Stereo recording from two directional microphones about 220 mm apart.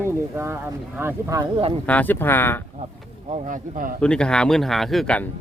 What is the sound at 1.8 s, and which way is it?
Speech, 5° left (ahead or behind).